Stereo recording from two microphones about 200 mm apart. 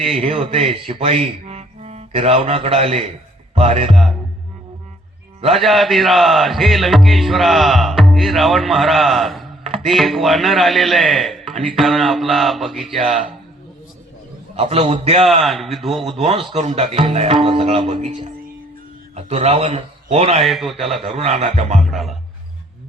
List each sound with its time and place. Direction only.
0.2 s speech: 25° right (ahead or behind)
3.5 s music: 30° right (ahead or behind)
3.9 s speech: centre (ahead or behind)
5.5 s speech: centre (ahead or behind)
9.6 s computer keyboard: 30° right (ahead or behind)
9.9 s speech: centre (ahead or behind)
12.9 s speech: 35° right (ahead or behind)
14.5 s speech: 30° right (ahead or behind)
15.4 s speech: centre (ahead or behind)
16.0 s a man's voice: 30° right (ahead or behind)
20.4 s speech: centre (ahead or behind)
21.2 s speech: 30° right (ahead or behind)
21.8 s speech: centre (ahead or behind)